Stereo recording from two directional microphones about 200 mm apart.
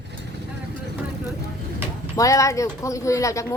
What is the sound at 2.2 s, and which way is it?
Speech, 15° left (ahead or behind).